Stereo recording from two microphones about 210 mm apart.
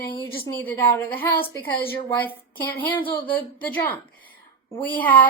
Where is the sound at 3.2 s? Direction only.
10° left (ahead or behind).